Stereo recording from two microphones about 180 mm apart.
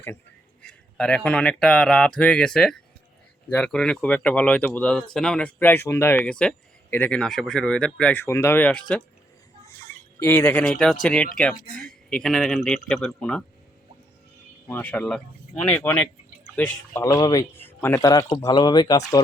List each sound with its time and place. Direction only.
0.6 s speech: 5° left (ahead or behind)
10.2 s speech: 10° left (ahead or behind)
14.7 s speech: 10° left (ahead or behind)
17.0 s speech: 20° left (ahead or behind)